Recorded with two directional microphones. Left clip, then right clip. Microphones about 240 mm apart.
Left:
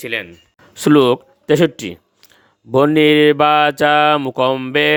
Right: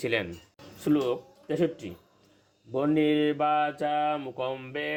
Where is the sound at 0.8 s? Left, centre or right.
Left.